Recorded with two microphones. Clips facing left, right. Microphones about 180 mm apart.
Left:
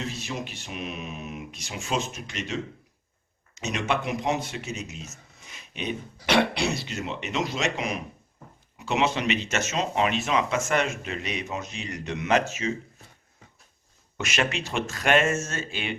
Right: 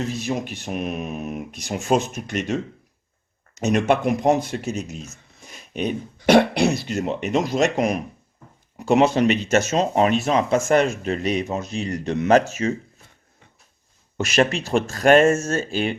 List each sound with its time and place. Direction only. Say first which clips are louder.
0.2 s speech: right 8 dB; 50° right (ahead or behind)
3.6 s speech: right 9 dB; 50° right (ahead or behind)
14.2 s speech: right 8 dB; 40° right (ahead or behind)